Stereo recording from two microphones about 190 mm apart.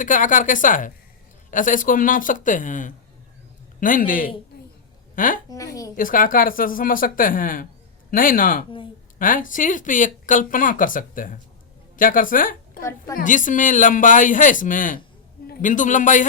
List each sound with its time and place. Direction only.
0.0 s speech: 45° left (ahead or behind)
4.5 s a sound: 50° left (ahead or behind)
5.1 s a woman's voice: 45° left (ahead or behind)
5.5 s a woman's voice: 20° left (ahead or behind)
6.0 s a woman's voice: 45° left (ahead or behind)